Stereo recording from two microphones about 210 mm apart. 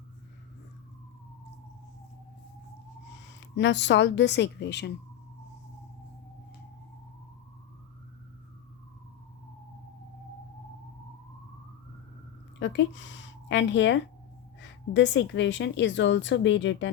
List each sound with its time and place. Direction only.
3.2 s speech: 60° left (ahead or behind)
12.5 s a woman's voice: 60° left (ahead or behind)